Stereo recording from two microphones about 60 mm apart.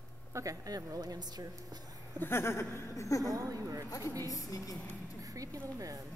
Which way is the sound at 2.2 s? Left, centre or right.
Left.